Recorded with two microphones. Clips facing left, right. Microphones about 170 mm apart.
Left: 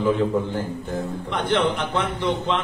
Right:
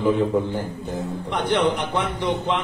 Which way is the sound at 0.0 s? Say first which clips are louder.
Right 1 dB; 15° right (ahead or behind).